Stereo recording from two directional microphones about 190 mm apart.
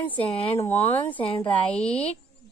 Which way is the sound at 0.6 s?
10° left (ahead or behind).